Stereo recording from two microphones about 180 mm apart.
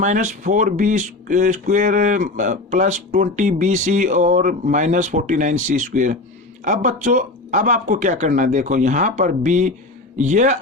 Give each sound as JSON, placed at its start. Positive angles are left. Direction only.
{"t": 0.0, "sound": "speech", "side_deg": -40}